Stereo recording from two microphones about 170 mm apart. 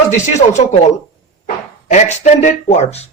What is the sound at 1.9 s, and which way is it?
A man's voice, 45° left (ahead or behind).